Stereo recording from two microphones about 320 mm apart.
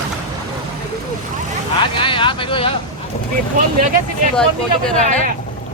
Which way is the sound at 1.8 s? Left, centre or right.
Centre.